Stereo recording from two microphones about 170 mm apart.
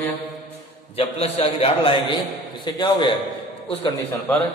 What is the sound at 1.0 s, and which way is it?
A man's voice, 35° left (ahead or behind).